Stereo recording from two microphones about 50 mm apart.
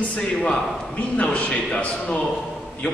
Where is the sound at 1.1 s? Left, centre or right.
Left.